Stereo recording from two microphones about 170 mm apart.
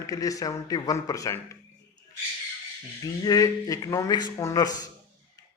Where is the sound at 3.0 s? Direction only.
20° left (ahead or behind).